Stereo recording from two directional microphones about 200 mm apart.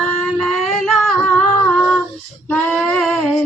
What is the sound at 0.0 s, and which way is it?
Singing, 5° left (ahead or behind).